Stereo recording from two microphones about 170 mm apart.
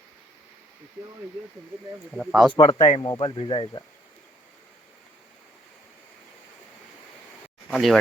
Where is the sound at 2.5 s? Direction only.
25° left (ahead or behind).